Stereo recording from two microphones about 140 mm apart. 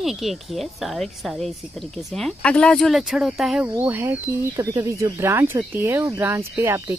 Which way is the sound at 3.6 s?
15° right (ahead or behind).